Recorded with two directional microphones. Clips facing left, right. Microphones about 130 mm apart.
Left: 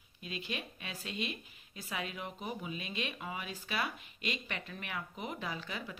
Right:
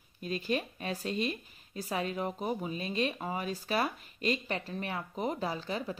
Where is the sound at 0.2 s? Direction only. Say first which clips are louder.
Right 9 dB; 40° right (ahead or behind).